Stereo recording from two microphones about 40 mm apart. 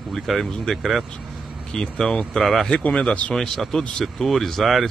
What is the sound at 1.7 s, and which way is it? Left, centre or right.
Speech, centre.